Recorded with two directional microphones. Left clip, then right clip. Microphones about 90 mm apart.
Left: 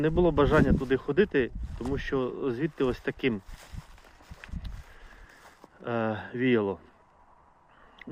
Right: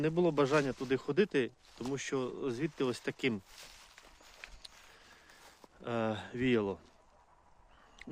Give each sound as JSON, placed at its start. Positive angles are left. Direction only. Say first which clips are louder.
{"t": 0.0, "sound": "speech", "louder": "left 6 dB", "side_deg": -30}
{"t": 0.9, "sound": "speech", "louder": "left 6 dB", "side_deg": -35}
{"t": 5.8, "sound": "speech", "louder": "left 5 dB", "side_deg": -30}